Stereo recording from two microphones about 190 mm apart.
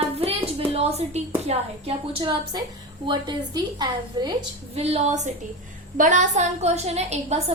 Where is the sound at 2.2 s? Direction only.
20° right (ahead or behind).